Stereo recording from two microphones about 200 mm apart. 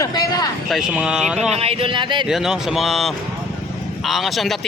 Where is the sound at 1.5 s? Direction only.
30° right (ahead or behind).